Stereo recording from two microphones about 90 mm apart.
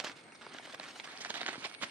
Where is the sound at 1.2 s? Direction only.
20° right (ahead or behind).